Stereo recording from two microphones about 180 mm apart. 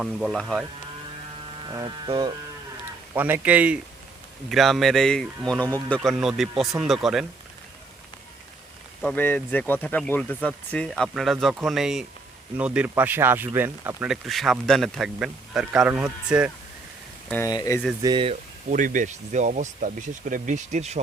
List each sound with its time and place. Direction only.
0.0 s speech: centre (ahead or behind)
1.6 s speech: 25° right (ahead or behind)
3.2 s speech: 10° right (ahead or behind)
9.0 s speech: 10° left (ahead or behind)
17.4 s speech: 20° left (ahead or behind)
18.0 s speech: 25° right (ahead or behind)
18.7 s speech: 45° right (ahead or behind)